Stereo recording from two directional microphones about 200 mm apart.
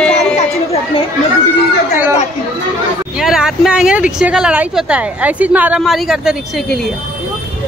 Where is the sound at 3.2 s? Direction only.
Centre (ahead or behind).